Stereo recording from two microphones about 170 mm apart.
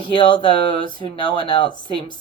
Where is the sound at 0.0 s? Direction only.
30° left (ahead or behind).